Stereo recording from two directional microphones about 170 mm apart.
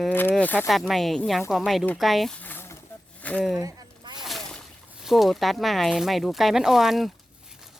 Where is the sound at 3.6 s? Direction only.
20° right (ahead or behind).